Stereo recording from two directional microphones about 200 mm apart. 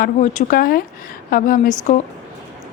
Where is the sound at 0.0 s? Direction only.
40° left (ahead or behind).